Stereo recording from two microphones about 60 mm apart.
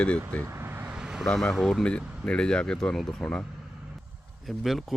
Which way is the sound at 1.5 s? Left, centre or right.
Centre.